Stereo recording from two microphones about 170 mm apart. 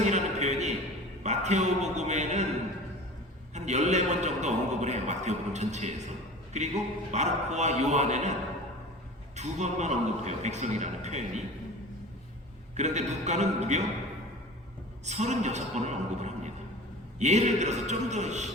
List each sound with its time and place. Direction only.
0.0 s a sound: 40° right (ahead or behind)
3.5 s a sound: 45° right (ahead or behind)
6.5 s a man's voice: 45° right (ahead or behind)
9.3 s a man's voice: 45° right (ahead or behind)
12.7 s a man's voice: 45° right (ahead or behind)
15.0 s a man's voice: 45° right (ahead or behind)